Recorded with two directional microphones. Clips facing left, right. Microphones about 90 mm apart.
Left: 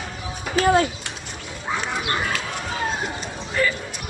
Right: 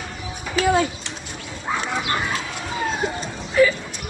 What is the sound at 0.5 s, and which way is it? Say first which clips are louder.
Speech: left 1 dB; 40° left (ahead or behind).